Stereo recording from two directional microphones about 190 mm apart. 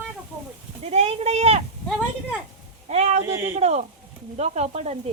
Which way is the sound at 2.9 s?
35° right (ahead or behind).